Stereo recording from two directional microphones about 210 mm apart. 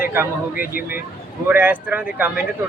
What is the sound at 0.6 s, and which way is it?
Speech, 45° left (ahead or behind).